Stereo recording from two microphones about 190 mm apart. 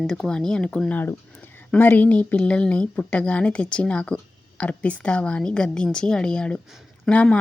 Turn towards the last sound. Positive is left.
turn(degrees=5)  # may be behind; listen again after turning